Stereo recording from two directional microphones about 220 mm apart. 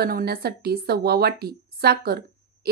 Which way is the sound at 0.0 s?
45° right (ahead or behind).